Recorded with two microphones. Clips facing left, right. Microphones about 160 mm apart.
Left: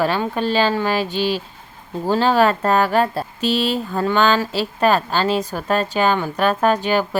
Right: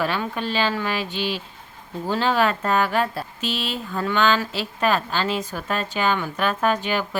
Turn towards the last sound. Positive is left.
turn(degrees=35)  # may be behind; listen again after turning